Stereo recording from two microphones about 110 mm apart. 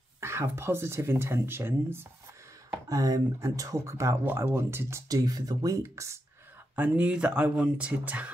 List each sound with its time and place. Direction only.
0.2 s speech: 25° right (ahead or behind)
2.9 s speech: 30° right (ahead or behind)
6.7 s speech: 15° right (ahead or behind)